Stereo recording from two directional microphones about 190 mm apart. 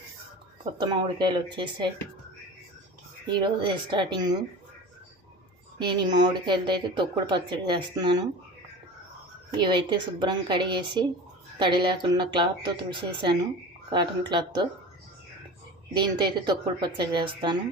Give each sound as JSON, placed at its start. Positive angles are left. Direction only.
{"t": 0.6, "sound": "a woman's voice", "side_deg": -25}
{"t": 3.2, "sound": "a woman's voice", "side_deg": -25}
{"t": 5.8, "sound": "a woman's voice", "side_deg": -25}
{"t": 9.6, "sound": "a woman's voice", "side_deg": -25}
{"t": 16.0, "sound": "a woman's voice", "side_deg": -25}